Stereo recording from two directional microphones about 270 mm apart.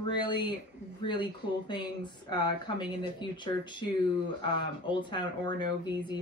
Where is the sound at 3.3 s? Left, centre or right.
Centre.